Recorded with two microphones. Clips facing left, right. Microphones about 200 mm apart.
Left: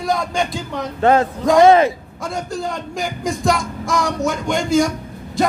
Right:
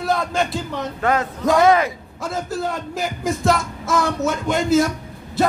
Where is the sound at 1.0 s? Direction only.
30° left (ahead or behind).